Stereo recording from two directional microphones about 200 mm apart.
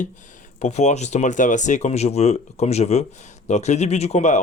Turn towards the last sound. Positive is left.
turn(degrees=35)  # may be behind; listen again after turning